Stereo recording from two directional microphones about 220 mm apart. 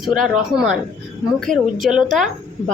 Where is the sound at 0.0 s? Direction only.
Centre (ahead or behind).